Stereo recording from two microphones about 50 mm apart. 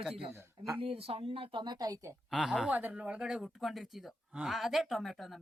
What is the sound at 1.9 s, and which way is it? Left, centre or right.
Speech, right.